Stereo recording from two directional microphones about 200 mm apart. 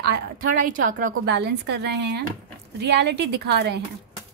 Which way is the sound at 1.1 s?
55° right (ahead or behind).